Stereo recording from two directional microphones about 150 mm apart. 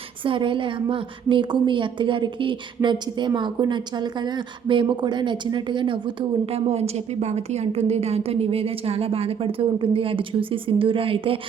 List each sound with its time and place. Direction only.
0.2 s a woman's voice: 35° right (ahead or behind)